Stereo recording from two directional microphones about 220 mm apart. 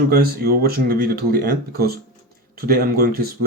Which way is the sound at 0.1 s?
45° right (ahead or behind).